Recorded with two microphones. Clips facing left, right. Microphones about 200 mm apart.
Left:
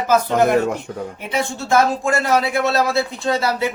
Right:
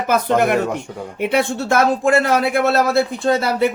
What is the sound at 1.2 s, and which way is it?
Speech, 65° right (ahead or behind).